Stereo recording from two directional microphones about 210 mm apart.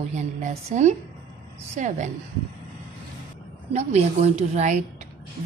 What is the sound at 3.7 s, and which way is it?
A woman's voice, 30° right (ahead or behind).